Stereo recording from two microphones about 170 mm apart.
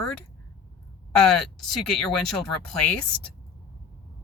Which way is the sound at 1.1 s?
5° left (ahead or behind).